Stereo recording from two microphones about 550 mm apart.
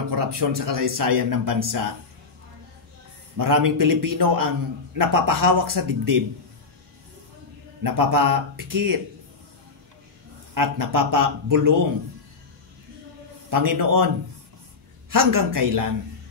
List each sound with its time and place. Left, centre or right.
0.1 s a man's voice: right
3.3 s a man's voice: right
7.8 s a man's voice: right
10.5 s a man's voice: right
13.5 s a man's voice: right